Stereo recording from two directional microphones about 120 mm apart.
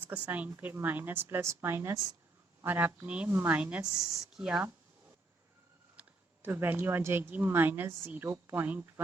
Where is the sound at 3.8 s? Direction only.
30° right (ahead or behind).